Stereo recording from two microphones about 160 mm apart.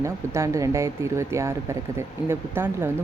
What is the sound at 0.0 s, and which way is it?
Speech, 20° right (ahead or behind).